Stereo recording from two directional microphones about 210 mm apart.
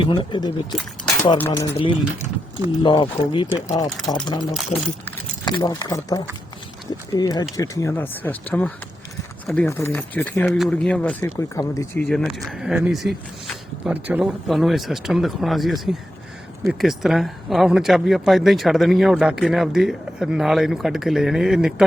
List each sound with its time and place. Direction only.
0.0 s speech: 20° left (ahead or behind)
0.8 s speech: centre (ahead or behind)
1.4 s speech: 15° left (ahead or behind)
3.8 s speech: centre (ahead or behind)
5.5 s speech: 20° left (ahead or behind)
12.0 s speech: centre (ahead or behind)